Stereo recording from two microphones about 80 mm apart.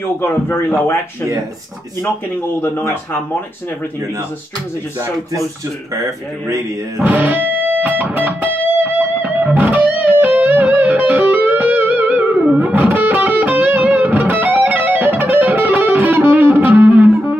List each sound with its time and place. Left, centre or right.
0.2 s a man's voice: left
2.6 s a man's voice: left
5.9 s a man's voice: right
7.0 s music: right